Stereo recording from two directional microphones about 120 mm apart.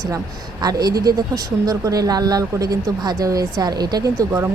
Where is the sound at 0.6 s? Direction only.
35° right (ahead or behind).